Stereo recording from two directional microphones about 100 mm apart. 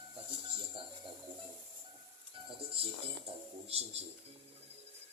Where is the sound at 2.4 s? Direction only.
70° right (ahead or behind); by 4.1 s 90° right.